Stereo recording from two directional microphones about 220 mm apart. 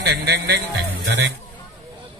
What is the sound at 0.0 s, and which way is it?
Speech, 50° right (ahead or behind).